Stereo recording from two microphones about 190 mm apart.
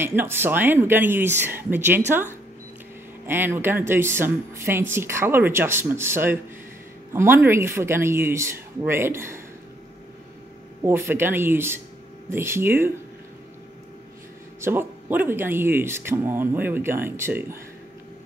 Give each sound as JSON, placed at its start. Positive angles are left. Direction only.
{"t": 0.0, "sound": "speech", "side_deg": -10}
{"t": 3.3, "sound": "speech", "side_deg": -10}
{"t": 10.8, "sound": "speech", "side_deg": -15}
{"t": 14.6, "sound": "speech", "side_deg": -10}